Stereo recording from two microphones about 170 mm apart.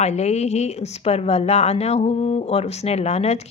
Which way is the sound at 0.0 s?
40° left (ahead or behind).